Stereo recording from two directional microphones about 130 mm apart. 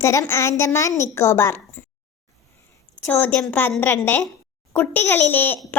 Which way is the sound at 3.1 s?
15° left (ahead or behind).